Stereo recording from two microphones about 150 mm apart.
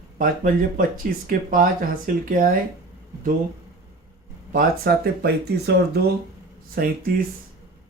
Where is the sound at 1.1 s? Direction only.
75° right (ahead or behind).